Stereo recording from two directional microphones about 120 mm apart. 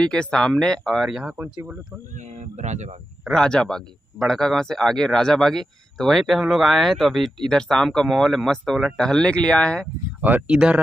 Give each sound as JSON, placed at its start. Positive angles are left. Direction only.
{"t": 0.0, "sound": "speech", "side_deg": 5}
{"t": 2.1, "sound": "speech", "side_deg": -85}
{"t": 3.3, "sound": "speech", "side_deg": 5}
{"t": 10.2, "sound": "speech", "side_deg": -15}